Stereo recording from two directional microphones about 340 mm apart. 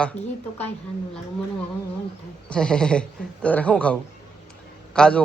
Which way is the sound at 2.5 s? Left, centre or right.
Centre.